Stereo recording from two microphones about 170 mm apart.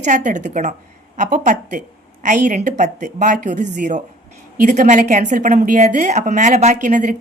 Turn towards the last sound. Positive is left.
turn(degrees=-50)  # may be behind; listen again after turning